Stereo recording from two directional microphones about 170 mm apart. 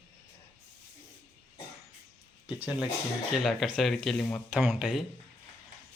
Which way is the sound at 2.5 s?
10° right (ahead or behind).